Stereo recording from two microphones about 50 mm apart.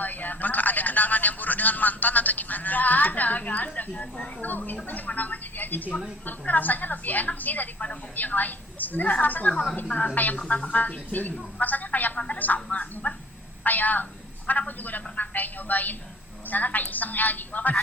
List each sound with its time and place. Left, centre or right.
0.0 s a man's voice: left
10.2 s a man's voice: left